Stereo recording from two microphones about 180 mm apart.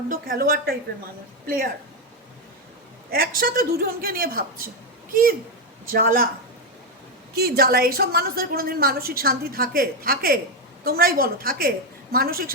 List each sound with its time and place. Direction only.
0.1 s a woman's voice: 55° right (ahead or behind)
3.1 s a woman's voice: 55° right (ahead or behind)
5.9 s speech: 50° right (ahead or behind)
7.3 s a woman's voice: 60° right (ahead or behind)